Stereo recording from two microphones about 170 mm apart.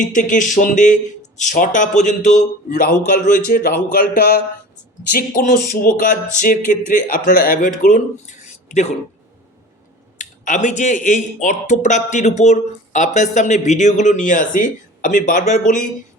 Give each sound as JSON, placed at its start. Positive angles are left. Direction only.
{"t": 0.1, "sound": "speech", "side_deg": 50}
{"t": 10.2, "sound": "speech", "side_deg": 50}